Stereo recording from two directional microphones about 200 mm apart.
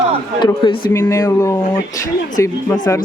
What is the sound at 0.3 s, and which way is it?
A man's voice, 20° left (ahead or behind).